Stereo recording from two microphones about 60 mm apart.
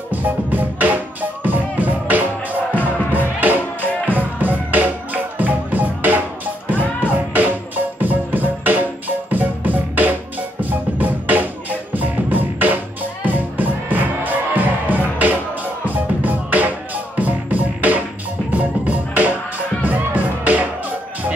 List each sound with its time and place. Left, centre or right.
0.1 s music: right